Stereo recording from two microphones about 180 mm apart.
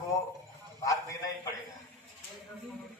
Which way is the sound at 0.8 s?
20° left (ahead or behind).